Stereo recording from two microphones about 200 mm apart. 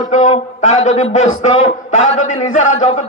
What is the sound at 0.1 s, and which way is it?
A man's voice, 40° left (ahead or behind).